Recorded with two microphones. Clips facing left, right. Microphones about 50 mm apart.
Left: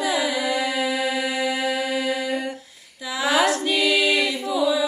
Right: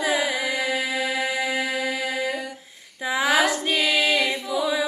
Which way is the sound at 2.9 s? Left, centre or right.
Right.